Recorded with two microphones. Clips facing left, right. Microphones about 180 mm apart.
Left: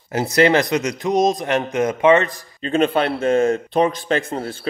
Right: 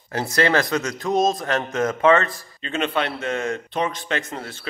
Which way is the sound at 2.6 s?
35° left (ahead or behind).